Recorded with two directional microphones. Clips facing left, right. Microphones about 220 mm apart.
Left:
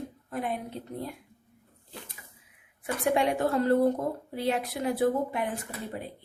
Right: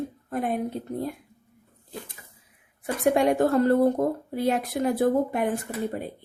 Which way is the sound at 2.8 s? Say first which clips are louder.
Right 5 dB; 45° right (ahead or behind).